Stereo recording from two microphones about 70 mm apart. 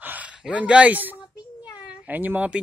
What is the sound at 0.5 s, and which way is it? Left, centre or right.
A man's voice, centre.